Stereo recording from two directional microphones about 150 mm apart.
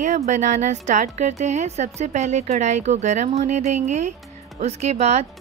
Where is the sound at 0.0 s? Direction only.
55° right (ahead or behind).